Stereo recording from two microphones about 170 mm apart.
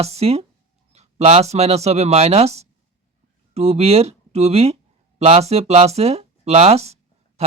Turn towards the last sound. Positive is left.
turn(degrees=-40)  # may be behind; listen again after turning